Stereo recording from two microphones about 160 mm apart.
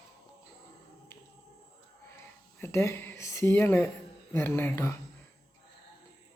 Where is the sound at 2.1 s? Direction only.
15° left (ahead or behind).